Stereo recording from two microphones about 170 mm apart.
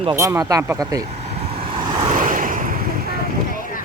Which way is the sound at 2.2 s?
50° right (ahead or behind).